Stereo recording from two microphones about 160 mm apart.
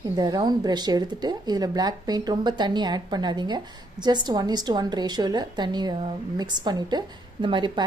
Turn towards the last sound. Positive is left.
turn(degrees=-30)  # may be behind; listen again after turning